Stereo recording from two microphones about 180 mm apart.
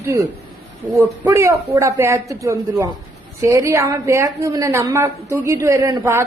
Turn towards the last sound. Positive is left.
turn(degrees=-15)  # may be behind; listen again after turning